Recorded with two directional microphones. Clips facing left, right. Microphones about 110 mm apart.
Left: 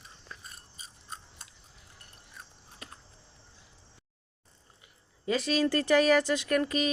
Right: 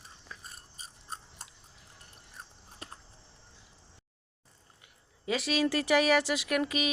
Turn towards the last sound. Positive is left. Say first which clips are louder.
# left 2 dB
turn(degrees=-5)  # may be behind; listen again after turning